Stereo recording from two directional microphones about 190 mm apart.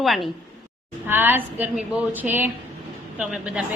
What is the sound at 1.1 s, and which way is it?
A woman's voice, 10° right (ahead or behind).